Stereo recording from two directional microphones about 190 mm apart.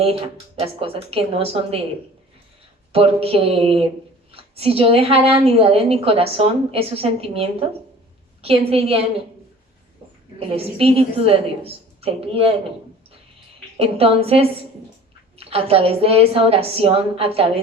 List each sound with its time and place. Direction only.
0.6 s a woman's voice: 30° right (ahead or behind)
2.9 s a woman's voice: 30° right (ahead or behind)
10.5 s a woman's voice: 30° right (ahead or behind)
13.7 s a woman's voice: 30° right (ahead or behind)